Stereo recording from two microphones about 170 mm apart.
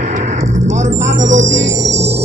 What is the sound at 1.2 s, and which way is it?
Speech, 45° right (ahead or behind).